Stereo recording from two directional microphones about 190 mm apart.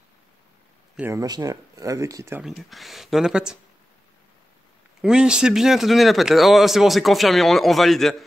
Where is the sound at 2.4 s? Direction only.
Centre (ahead or behind).